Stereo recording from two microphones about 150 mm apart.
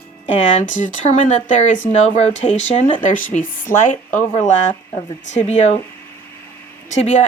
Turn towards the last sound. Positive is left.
turn(degrees=50)  # may be behind; listen again after turning